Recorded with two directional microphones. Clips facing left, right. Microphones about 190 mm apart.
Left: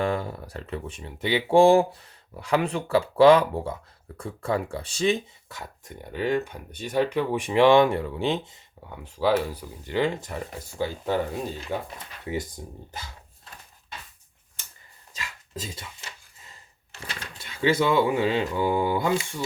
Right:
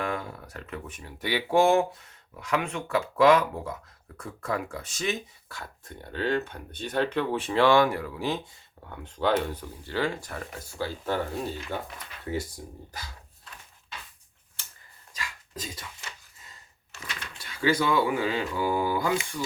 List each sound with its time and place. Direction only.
0.0 s speech: 30° left (ahead or behind)
8.9 s speech: 10° left (ahead or behind)
12.6 s speech: 25° left (ahead or behind)
15.1 s dog: 25° left (ahead or behind)
17.0 s speech: 30° left (ahead or behind)